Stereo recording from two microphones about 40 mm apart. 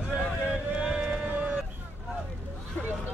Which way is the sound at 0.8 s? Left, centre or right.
Right.